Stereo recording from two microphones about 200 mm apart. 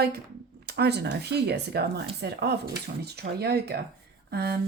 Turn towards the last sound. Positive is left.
turn(degrees=-55)  # may be behind; listen again after turning